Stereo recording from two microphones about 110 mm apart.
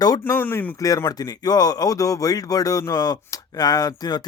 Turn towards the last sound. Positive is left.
turn(degrees=40)  # may be behind; listen again after turning